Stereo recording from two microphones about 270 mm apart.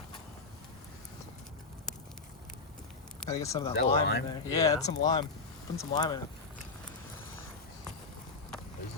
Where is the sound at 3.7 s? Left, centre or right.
Left.